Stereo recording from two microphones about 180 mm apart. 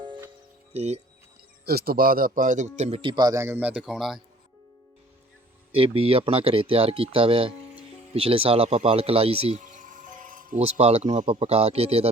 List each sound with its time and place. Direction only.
0.7 s a man's voice: 35° right (ahead or behind)
1.6 s a man's voice: 60° right (ahead or behind); by 4.2 s centre (ahead or behind)
5.7 s a man's voice: 30° right (ahead or behind); by 10.6 s 45° right (ahead or behind)
10.6 s a man's voice: 35° right (ahead or behind)